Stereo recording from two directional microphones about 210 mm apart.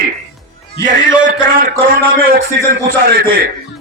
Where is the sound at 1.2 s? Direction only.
40° right (ahead or behind).